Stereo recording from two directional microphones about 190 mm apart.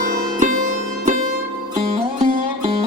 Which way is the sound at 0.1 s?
45° right (ahead or behind).